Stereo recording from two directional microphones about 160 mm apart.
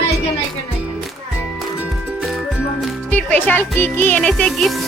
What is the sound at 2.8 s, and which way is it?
Speech, 10° left (ahead or behind).